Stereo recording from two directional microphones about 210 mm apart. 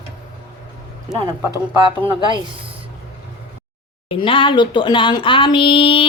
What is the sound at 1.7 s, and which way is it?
Speech, 25° right (ahead or behind).